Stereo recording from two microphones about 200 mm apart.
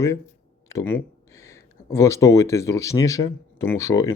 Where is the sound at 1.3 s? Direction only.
15° left (ahead or behind).